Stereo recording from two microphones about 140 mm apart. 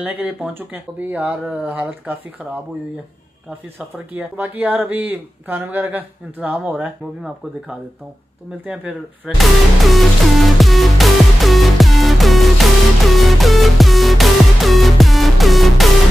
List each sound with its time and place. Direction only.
0.0 s speech: 10° right (ahead or behind)
4.1 s speech: 15° right (ahead or behind)
8.6 s music: 10° right (ahead or behind)